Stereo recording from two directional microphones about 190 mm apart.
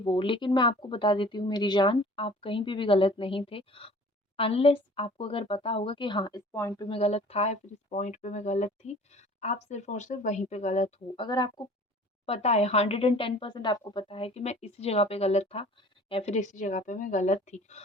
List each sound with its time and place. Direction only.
0.0 s speech: 25° left (ahead or behind)
6.8 s speech: 30° left (ahead or behind)
11.3 s speech: 20° left (ahead or behind)
12.2 s speech: 35° left (ahead or behind)